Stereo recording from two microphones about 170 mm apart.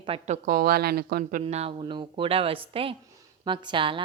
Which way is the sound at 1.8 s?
30° right (ahead or behind).